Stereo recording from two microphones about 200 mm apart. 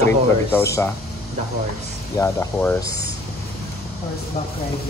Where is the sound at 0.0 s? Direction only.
10° left (ahead or behind).